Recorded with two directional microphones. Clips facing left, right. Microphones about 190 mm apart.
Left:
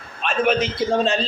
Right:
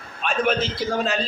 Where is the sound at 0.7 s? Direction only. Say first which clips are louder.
Left 4 dB; 25° left (ahead or behind).